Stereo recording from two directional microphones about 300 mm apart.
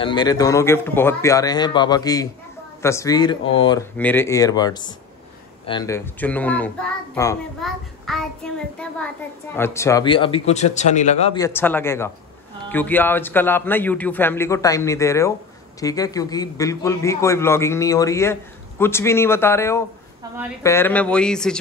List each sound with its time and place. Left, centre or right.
0.0 s a man's voice: centre